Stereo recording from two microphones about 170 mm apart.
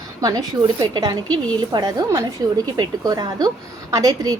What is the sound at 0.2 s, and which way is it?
A woman's voice, 20° right (ahead or behind).